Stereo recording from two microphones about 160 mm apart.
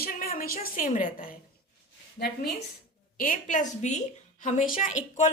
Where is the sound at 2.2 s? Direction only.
85° left.